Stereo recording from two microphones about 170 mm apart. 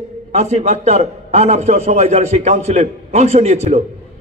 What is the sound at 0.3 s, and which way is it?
A man's voice, 40° right (ahead or behind).